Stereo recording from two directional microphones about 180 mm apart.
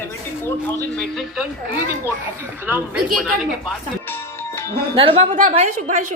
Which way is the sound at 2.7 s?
10° right (ahead or behind).